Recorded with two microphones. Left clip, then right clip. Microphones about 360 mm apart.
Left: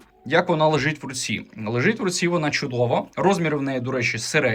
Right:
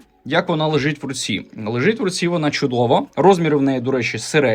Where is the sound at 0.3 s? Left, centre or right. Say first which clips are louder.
Even; centre.